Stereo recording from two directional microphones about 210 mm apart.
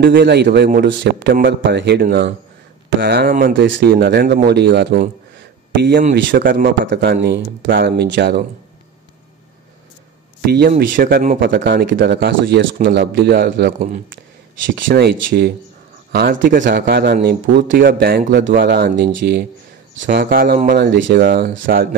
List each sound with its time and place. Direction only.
0.0 s a man's voice: 50° right (ahead or behind)
1.0 s a man's voice: 55° right (ahead or behind)
3.5 s a man's voice: 55° right (ahead or behind)
6.1 s a man's voice: 40° right (ahead or behind)
6.9 s a man's voice: 55° right (ahead or behind)
10.4 s a man's voice: 50° right (ahead or behind)